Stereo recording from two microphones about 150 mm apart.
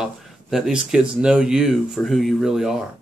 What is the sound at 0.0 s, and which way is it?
Speech, 5° right (ahead or behind).